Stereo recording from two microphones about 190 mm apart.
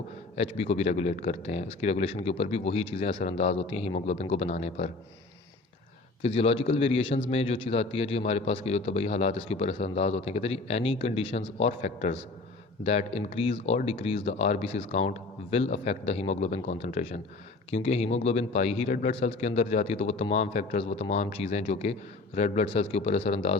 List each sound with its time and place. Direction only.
0.3 s a man's voice: 35° left (ahead or behind)
6.2 s a man's voice: 30° left (ahead or behind)